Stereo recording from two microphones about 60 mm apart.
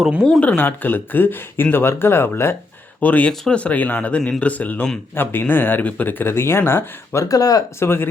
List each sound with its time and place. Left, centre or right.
0.3 s speech: left
3.0 s speech: left
5.1 s speech: left
7.3 s speech: left
7.8 s speech: left